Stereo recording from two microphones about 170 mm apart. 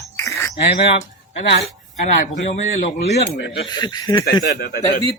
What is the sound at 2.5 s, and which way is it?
Speech, 40° left (ahead or behind).